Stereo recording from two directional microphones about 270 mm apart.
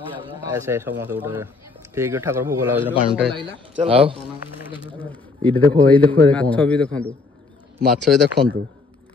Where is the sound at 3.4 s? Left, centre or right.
Centre.